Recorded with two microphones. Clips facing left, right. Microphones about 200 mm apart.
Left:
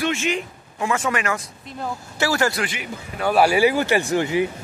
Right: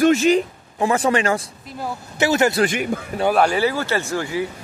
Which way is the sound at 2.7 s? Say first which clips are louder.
Right 9 dB; 50° right (ahead or behind).